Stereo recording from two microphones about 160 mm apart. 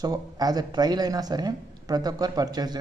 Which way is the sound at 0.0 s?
25° right (ahead or behind).